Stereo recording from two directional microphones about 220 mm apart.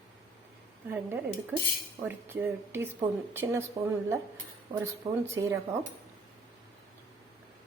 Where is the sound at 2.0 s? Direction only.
10° right (ahead or behind).